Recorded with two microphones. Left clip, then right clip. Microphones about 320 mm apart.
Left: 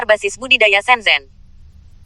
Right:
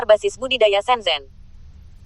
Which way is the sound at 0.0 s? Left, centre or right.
Left.